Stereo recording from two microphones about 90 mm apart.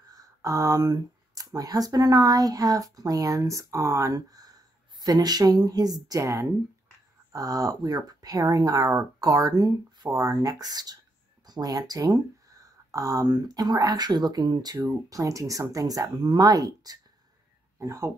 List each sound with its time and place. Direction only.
0.0 s speech: 40° right (ahead or behind)
15.0 s speech: 40° right (ahead or behind)